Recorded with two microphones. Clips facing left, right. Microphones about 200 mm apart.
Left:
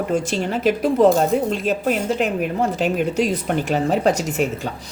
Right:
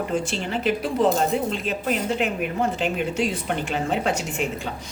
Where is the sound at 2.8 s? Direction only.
40° left (ahead or behind).